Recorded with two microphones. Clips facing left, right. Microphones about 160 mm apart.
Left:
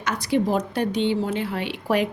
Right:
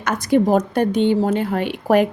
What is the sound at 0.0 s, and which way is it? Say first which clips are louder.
A woman's voice: right 6 dB; 50° right (ahead or behind).